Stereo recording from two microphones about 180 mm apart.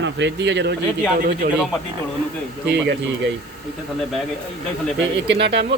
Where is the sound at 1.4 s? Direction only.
55° right (ahead or behind).